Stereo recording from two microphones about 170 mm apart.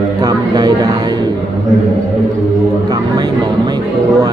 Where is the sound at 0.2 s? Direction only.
20° right (ahead or behind).